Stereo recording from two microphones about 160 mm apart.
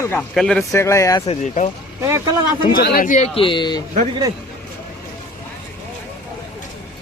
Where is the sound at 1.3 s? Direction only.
45° left (ahead or behind).